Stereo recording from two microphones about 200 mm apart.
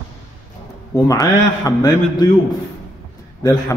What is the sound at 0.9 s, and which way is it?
A man's voice, 15° left (ahead or behind).